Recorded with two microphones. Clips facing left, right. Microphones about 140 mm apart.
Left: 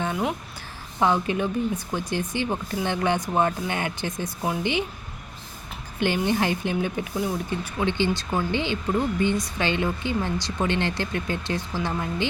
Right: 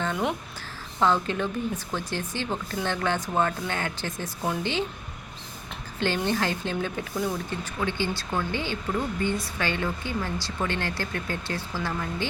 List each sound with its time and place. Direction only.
0.0 s speech: 5° left (ahead or behind)
6.0 s speech: 15° left (ahead or behind)
7.8 s speech: 20° left (ahead or behind)